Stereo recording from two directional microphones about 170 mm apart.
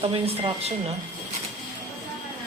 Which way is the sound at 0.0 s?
35° right (ahead or behind).